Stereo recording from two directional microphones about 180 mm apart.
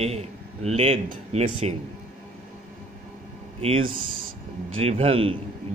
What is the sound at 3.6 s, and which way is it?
A man's voice, 30° right (ahead or behind).